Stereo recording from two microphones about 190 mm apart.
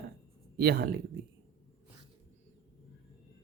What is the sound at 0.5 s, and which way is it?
Speech, 55° right (ahead or behind).